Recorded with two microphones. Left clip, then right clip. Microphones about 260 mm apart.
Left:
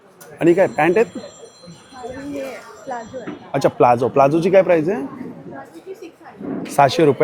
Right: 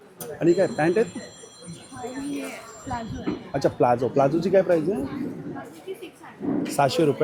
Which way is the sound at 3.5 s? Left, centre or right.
Centre.